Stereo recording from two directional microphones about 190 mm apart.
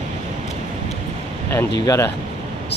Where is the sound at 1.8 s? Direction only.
20° left (ahead or behind).